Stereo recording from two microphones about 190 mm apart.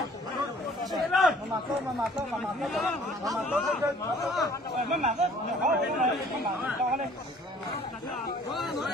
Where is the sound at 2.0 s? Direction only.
Centre (ahead or behind).